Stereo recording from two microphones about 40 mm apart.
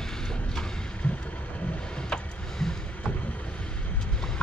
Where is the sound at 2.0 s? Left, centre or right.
Centre.